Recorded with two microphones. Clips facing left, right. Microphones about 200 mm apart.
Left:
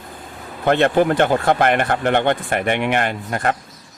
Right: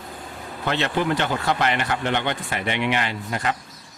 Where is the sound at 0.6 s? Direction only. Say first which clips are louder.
Left 8 dB; 50° left (ahead or behind).